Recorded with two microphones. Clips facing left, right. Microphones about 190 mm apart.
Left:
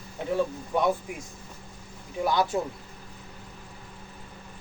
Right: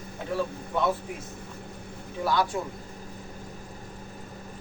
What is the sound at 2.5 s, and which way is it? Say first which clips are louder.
Speech: left 3 dB; 25° left (ahead or behind).